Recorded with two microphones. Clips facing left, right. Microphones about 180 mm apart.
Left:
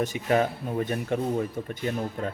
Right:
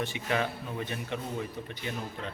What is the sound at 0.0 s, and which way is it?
Speech, 40° left (ahead or behind).